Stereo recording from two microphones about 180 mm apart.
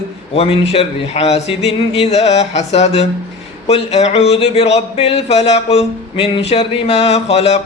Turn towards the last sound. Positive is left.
turn(degrees=35)  # may be behind; listen again after turning